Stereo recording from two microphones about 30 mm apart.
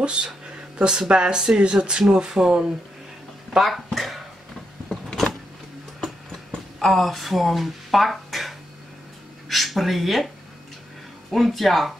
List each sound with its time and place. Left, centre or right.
0.0 s speech: right
3.5 s a sound: centre
6.8 s speech: centre